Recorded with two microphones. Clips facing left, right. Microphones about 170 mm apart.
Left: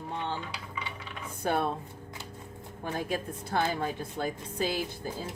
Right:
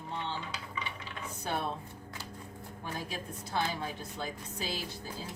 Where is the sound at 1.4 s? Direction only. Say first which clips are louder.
Left 7 dB; 55° left (ahead or behind).